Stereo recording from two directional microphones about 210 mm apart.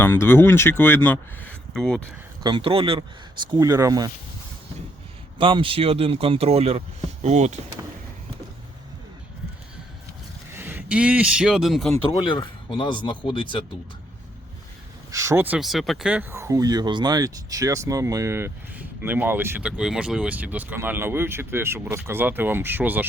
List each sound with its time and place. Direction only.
0.0 s speech: 10° left (ahead or behind)
2.4 s speech: 25° right (ahead or behind)
5.4 s speech: 25° right (ahead or behind)
10.5 s speech: 10° right (ahead or behind)
12.1 s speech: 20° left (ahead or behind)
15.1 s speech: 15° right (ahead or behind)